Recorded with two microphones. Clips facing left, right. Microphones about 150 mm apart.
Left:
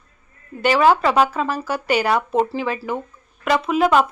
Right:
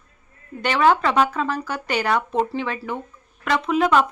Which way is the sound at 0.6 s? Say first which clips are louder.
Left 3 dB; 5° left (ahead or behind).